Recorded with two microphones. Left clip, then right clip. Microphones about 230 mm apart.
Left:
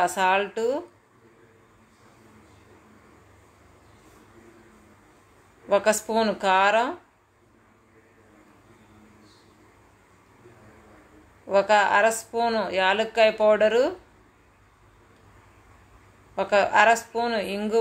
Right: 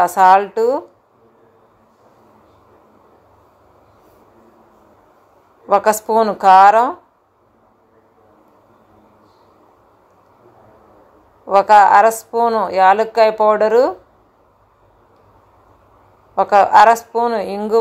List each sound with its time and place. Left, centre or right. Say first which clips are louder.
0.0 s a woman's voice: right 12 dB; right
5.7 s a woman's voice: right 8 dB; centre
11.4 s a woman's voice: right 11 dB; centre
16.3 s a woman's voice: right 10 dB; centre